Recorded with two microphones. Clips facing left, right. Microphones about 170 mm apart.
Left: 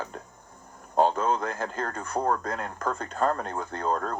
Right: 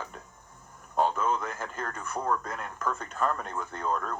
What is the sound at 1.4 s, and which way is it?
Speech, 35° left (ahead or behind).